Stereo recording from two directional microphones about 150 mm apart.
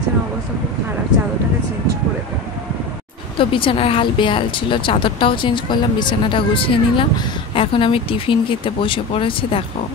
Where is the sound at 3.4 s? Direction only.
35° left (ahead or behind).